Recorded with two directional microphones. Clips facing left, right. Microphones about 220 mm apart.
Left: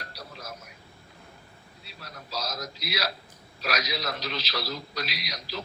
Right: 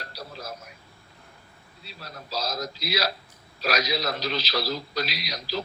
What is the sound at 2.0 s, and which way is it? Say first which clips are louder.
A man's voice: right 3 dB; 30° right (ahead or behind).